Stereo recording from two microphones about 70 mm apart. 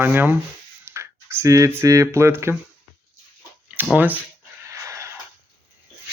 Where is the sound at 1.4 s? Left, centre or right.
Right.